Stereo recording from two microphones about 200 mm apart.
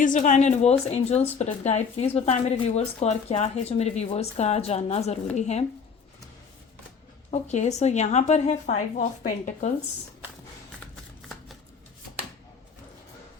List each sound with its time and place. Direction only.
0.0 s speech: 40° left (ahead or behind)
7.3 s speech: 35° left (ahead or behind)